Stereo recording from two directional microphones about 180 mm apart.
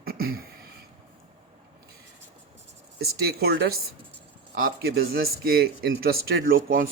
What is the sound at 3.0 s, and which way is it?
Speech, 60° right (ahead or behind).